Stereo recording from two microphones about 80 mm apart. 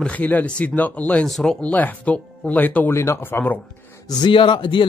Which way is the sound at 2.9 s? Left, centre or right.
Left.